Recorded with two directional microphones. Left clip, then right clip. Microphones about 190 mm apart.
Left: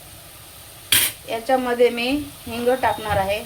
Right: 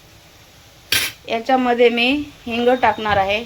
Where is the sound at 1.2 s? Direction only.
40° right (ahead or behind).